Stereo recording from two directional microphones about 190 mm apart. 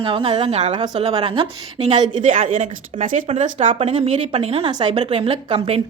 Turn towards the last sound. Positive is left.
turn(degrees=-30)  # may be behind; listen again after turning